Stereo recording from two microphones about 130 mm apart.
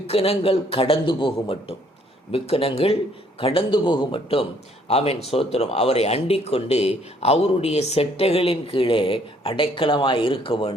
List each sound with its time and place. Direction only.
0.1 s speech: 45° left (ahead or behind)